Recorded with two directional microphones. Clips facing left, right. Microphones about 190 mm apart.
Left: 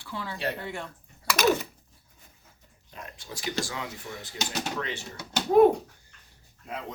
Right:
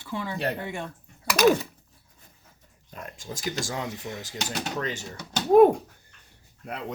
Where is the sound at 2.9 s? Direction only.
45° right (ahead or behind).